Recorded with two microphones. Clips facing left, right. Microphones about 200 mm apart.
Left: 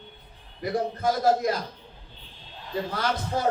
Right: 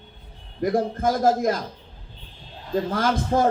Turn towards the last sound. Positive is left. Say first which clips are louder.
# right 6 dB
turn(degrees=-45)  # may be behind; listen again after turning